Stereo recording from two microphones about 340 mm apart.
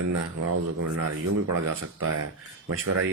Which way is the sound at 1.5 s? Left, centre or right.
Right.